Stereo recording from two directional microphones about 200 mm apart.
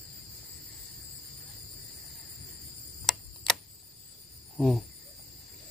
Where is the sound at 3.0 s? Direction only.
Centre (ahead or behind).